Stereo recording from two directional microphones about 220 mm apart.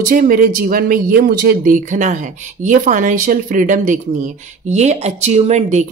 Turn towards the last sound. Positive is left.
turn(degrees=-30)  # may be behind; listen again after turning